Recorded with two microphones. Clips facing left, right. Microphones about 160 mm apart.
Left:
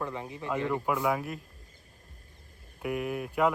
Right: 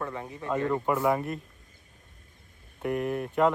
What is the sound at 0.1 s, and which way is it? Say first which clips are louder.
Speech: right 1 dB; 15° left (ahead or behind).